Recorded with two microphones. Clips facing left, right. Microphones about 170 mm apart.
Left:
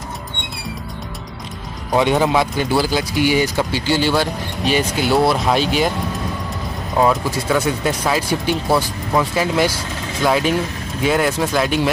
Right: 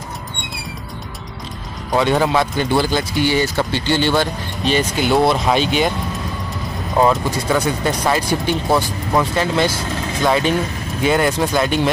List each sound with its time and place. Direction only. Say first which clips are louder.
2.0 s speech: even; 15° left (ahead or behind)
2.5 s speech: right 1 dB; 5° left (ahead or behind)
7.0 s speech: right 1 dB; centre (ahead or behind)